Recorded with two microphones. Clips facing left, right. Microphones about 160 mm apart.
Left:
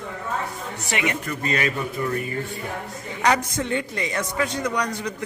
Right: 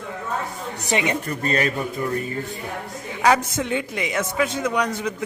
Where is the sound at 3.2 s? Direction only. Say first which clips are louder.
Right 3 dB; 5° right (ahead or behind).